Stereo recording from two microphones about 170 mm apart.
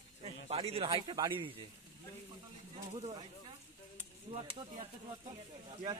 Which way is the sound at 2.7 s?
35° right (ahead or behind).